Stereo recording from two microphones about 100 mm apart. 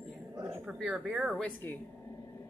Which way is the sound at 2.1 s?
35° left (ahead or behind).